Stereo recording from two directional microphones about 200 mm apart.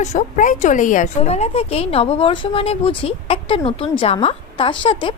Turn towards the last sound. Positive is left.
turn(degrees=25)  # may be behind; listen again after turning